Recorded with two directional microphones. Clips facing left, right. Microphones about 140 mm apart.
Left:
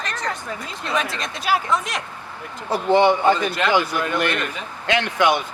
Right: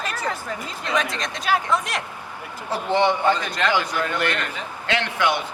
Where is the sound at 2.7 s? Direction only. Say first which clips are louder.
Left 4 dB; 15° left (ahead or behind).